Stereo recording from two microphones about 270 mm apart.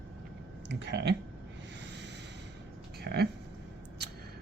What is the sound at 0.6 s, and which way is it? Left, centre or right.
Speech, right.